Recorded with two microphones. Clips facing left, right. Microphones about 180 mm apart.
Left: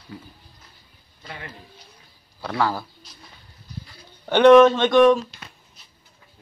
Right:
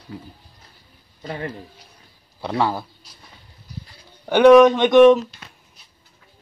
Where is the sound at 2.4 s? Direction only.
20° right (ahead or behind).